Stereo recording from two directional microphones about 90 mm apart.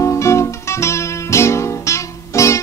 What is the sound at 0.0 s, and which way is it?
Guitar, 30° left (ahead or behind).